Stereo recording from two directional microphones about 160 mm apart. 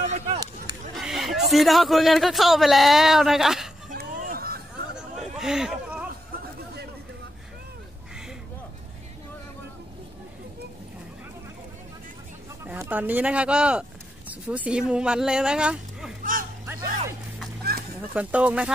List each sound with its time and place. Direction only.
0.0 s a sound: 45° right (ahead or behind)
0.9 s speech: centre (ahead or behind)
3.9 s a sound: 65° right (ahead or behind)
5.4 s speech: 5° right (ahead or behind)
6.3 s chatter: 90° right
12.6 s speech: 10° right (ahead or behind)
18.1 s speech: 10° right (ahead or behind)